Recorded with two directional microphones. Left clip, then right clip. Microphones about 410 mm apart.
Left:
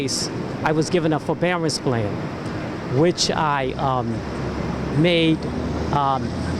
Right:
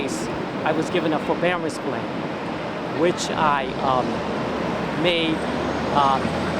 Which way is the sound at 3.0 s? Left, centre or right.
Left.